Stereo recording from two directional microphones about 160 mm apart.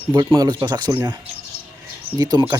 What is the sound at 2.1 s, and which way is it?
Speech, 25° right (ahead or behind).